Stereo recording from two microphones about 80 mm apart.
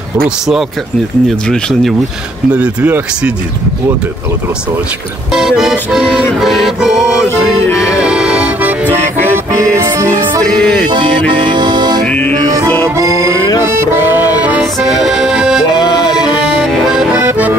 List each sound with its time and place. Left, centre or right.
1.5 s music: centre
2.5 s music: centre
5.3 s music: centre
7.2 s music: left
8.0 s accordion: centre
9.8 s music: right
10.6 s music: centre
10.9 s music: right
12.4 s music: right
14.6 s accordion: centre
15.8 s music: left
16.4 s accordion: centre
17.1 s accordion: right